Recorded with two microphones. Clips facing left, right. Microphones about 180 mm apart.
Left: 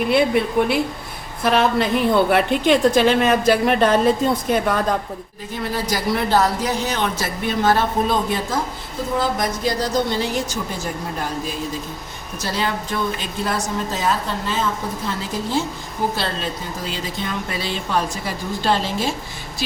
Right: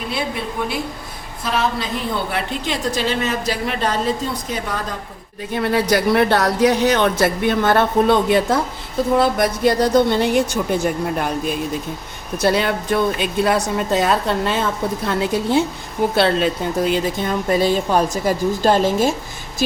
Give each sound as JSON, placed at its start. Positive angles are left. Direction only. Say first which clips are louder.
{"t": 0.1, "sound": "a woman's voice", "louder": "left 8 dB", "side_deg": 60}
{"t": 5.5, "sound": "speech", "louder": "right 7 dB", "side_deg": -60}
{"t": 12.4, "sound": "a woman's voice", "louder": "right 6 dB", "side_deg": -60}